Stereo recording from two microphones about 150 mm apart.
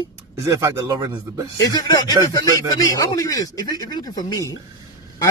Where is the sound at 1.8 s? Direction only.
25° left (ahead or behind).